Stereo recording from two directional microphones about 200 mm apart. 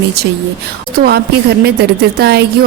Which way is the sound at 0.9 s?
50° right (ahead or behind).